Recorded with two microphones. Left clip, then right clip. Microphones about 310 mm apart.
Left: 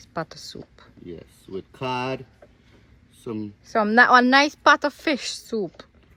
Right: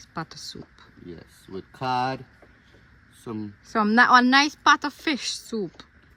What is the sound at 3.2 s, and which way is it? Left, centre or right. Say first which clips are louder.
Speech: left 3 dB; centre.